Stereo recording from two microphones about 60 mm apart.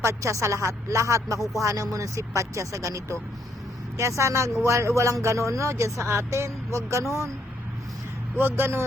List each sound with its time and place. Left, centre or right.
0.0 s a man's voice: right
8.4 s a man's voice: right